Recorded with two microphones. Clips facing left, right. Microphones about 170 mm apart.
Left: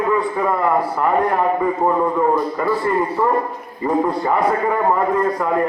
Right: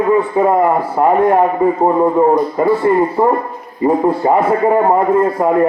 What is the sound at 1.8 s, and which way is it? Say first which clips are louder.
A man's voice: right 6 dB; 30° right (ahead or behind).